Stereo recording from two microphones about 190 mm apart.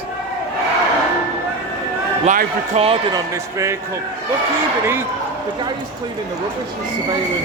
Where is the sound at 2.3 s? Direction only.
40° right (ahead or behind).